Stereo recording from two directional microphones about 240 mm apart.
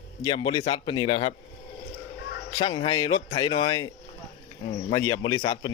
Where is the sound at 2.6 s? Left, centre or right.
Centre.